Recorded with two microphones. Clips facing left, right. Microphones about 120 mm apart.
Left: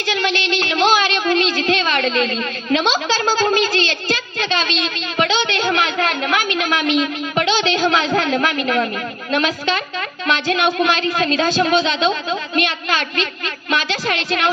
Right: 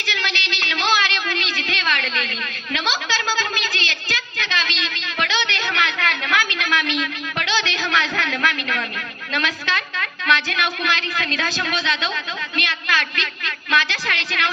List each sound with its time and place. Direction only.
0.0 s a woman's voice: 20° left (ahead or behind)